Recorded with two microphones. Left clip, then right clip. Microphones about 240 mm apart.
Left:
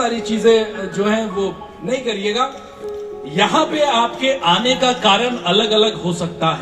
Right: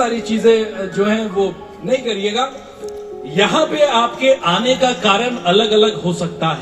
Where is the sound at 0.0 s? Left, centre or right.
Left.